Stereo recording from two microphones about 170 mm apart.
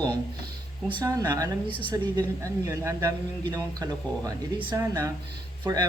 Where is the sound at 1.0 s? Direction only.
20° right (ahead or behind).